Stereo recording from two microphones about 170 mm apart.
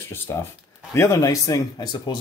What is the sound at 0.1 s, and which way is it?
Speech, 15° left (ahead or behind).